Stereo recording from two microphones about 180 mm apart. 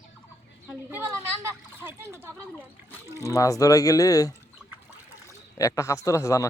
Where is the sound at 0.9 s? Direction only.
10° right (ahead or behind).